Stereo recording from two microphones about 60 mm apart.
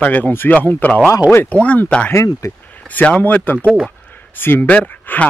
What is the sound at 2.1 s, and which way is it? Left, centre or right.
Speech, left.